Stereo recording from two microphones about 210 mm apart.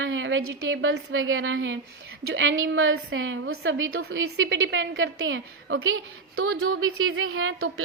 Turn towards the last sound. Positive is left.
turn(degrees=-85)